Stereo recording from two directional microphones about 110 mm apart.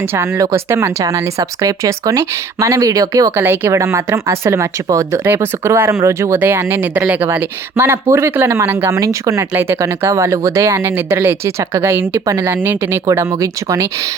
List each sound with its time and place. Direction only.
0.0 s speech: 20° right (ahead or behind)
12.5 s speech: 20° right (ahead or behind)